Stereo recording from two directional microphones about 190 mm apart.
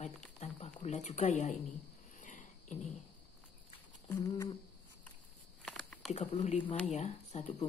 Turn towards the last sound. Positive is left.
turn(degrees=35)  # may be behind; listen again after turning